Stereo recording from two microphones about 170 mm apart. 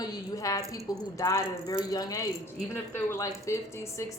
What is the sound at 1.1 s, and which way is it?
A woman's voice, 15° left (ahead or behind).